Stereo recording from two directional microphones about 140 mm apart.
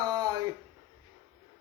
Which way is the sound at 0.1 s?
25° right (ahead or behind).